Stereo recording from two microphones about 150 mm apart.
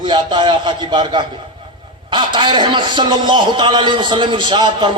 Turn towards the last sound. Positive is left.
turn(degrees=-30)  # may be behind; listen again after turning